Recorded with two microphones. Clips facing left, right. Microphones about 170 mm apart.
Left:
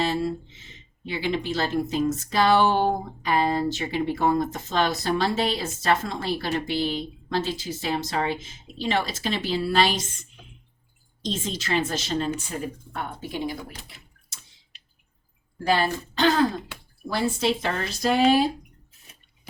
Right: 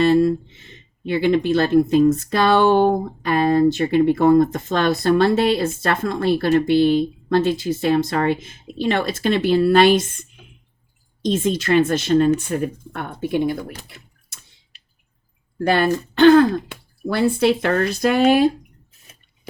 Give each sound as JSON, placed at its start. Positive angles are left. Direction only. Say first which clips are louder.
{"t": 0.0, "sound": "speech", "louder": "right 10 dB", "side_deg": -55}
{"t": 15.5, "sound": "speech", "louder": "right 6 dB", "side_deg": -60}